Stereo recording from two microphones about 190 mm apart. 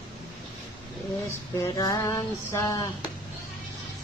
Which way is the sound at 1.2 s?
15° left (ahead or behind).